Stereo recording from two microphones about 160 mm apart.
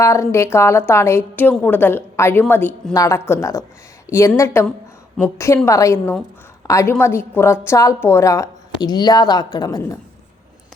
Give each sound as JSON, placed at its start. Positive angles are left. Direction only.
{"t": 0.0, "sound": "a woman's voice", "side_deg": 20}